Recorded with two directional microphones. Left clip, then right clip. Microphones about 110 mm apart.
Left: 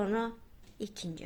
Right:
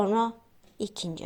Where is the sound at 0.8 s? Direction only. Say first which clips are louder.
Right 7 dB; 45° right (ahead or behind).